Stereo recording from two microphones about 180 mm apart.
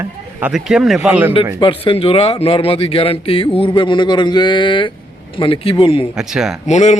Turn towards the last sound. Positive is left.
turn(degrees=40)  # may be behind; listen again after turning